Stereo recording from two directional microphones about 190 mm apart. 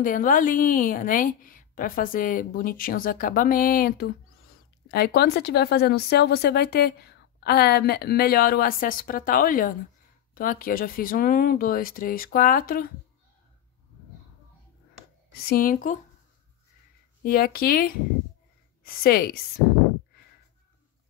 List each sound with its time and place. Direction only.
0.0 s a woman's voice: 45° left (ahead or behind)
15.3 s a woman's voice: 50° left (ahead or behind)
17.2 s a woman's voice: 50° left (ahead or behind)
19.0 s a woman's voice: 50° left (ahead or behind)